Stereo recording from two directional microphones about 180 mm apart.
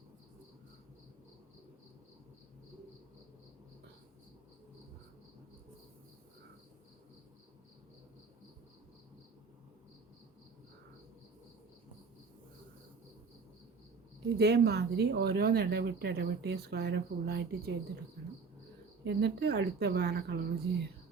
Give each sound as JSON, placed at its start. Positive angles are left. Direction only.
{"t": 14.3, "sound": "speech", "side_deg": -65}
{"t": 19.0, "sound": "a woman's voice", "side_deg": -70}